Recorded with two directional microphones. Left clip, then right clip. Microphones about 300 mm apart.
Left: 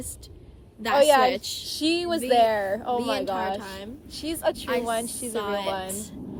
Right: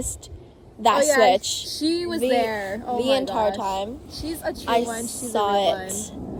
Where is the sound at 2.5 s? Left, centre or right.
Centre.